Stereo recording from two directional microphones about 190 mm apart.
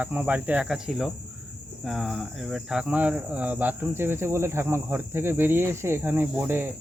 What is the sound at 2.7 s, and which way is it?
Speech, 5° right (ahead or behind).